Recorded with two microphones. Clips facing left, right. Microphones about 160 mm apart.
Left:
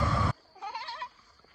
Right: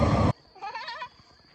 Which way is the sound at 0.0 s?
20° right (ahead or behind).